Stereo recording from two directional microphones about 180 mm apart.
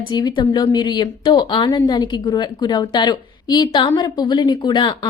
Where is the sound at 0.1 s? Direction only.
25° left (ahead or behind).